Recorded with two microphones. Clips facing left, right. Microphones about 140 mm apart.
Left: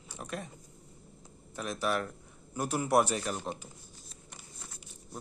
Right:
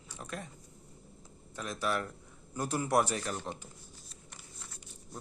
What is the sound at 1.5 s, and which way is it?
Speech, 15° left (ahead or behind).